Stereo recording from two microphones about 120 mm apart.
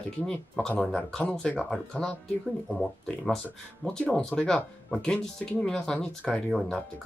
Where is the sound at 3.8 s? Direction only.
5° left (ahead or behind).